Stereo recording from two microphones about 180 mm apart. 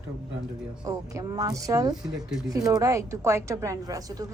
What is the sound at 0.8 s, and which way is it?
A woman's voice, 20° right (ahead or behind).